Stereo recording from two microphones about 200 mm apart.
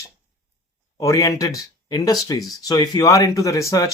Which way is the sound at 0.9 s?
15° left (ahead or behind).